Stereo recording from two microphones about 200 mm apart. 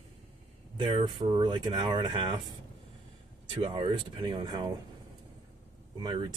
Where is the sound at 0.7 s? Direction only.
25° right (ahead or behind).